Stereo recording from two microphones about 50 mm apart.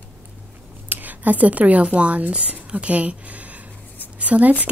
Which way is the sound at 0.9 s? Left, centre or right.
Right.